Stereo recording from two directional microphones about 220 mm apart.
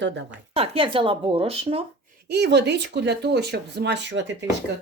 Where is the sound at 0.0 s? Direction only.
55° right (ahead or behind).